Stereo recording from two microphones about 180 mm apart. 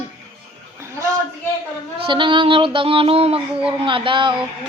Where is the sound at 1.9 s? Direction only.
30° right (ahead or behind).